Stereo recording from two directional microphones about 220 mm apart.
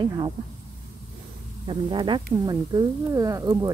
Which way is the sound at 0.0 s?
20° right (ahead or behind).